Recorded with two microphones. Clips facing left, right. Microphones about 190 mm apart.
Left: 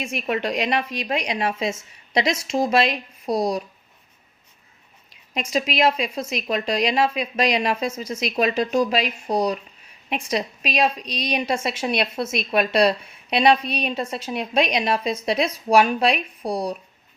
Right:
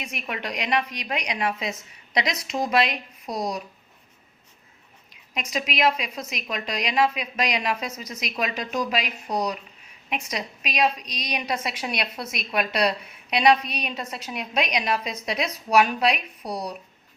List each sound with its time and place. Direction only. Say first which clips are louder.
0.0 s speech: left 8 dB; 30° left (ahead or behind)
5.3 s speech: left 5 dB; 30° left (ahead or behind)